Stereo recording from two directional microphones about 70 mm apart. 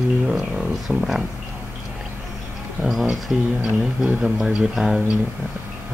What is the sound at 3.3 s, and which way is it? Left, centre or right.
Speech, centre.